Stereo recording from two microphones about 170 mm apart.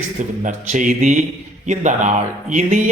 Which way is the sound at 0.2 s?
45° right (ahead or behind).